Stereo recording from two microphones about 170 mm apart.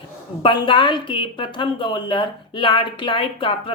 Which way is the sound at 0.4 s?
30° left (ahead or behind).